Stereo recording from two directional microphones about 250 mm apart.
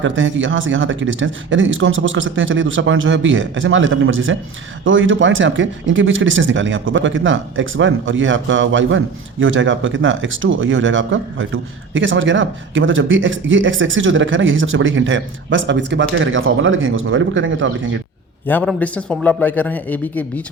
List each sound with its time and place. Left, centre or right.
0.0 s speech: right
18.4 s a man's voice: centre